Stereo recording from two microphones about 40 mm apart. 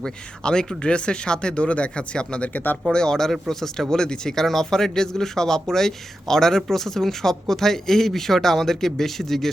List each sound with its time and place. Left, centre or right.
0.0 s speech: centre
2.5 s speech: left
2.9 s a man's voice: centre